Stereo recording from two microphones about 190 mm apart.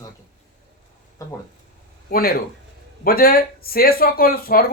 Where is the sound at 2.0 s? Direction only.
50° left (ahead or behind).